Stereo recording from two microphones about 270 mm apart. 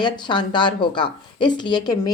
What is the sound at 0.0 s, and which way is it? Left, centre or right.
Speech, centre.